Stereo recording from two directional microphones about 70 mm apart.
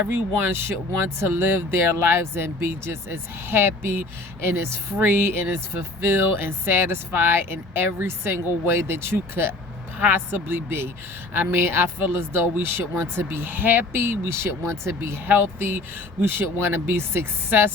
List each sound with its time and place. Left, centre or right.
0.1 s speech: right